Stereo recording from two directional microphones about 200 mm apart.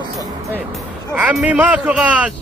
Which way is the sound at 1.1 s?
5° right (ahead or behind).